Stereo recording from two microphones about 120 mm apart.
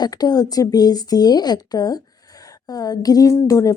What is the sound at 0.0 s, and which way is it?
A woman's voice, 35° left (ahead or behind).